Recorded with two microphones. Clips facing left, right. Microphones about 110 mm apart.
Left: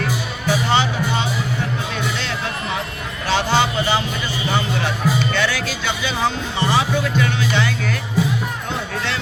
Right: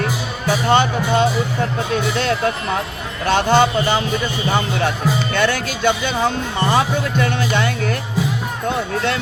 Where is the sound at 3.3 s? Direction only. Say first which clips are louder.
Right 4 dB; 50° right (ahead or behind).